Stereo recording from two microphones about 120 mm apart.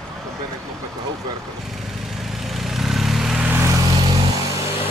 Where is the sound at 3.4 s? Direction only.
20° right (ahead or behind).